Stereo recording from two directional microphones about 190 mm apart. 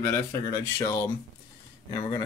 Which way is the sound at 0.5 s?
20° left (ahead or behind).